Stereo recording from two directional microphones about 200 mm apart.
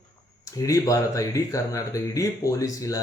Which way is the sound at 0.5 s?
15° left (ahead or behind).